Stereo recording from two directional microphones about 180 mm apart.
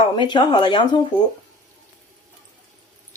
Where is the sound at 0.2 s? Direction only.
25° left (ahead or behind).